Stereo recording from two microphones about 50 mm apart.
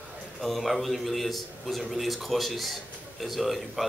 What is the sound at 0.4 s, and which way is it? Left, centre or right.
A man's voice, centre.